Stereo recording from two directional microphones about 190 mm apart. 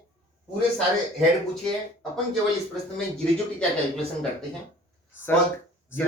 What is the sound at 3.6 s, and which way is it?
Speech, 5° left (ahead or behind).